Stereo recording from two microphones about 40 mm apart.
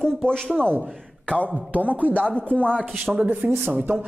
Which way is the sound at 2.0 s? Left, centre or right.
Left.